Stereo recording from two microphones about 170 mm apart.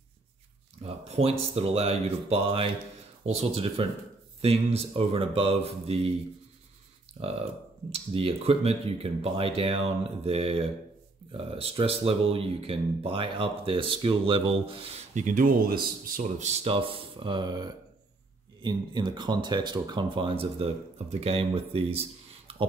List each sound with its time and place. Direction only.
0.8 s speech: 35° right (ahead or behind)
7.2 s speech: 35° right (ahead or behind)